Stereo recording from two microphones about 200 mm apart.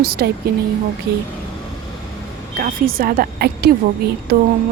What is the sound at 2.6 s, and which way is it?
Speech, 45° right (ahead or behind).